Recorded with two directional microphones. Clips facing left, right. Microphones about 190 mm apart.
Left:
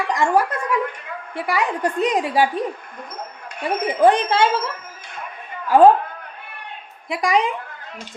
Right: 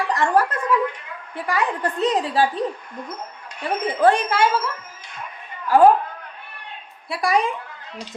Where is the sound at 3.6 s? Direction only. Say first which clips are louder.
Left 2 dB; 15° left (ahead or behind).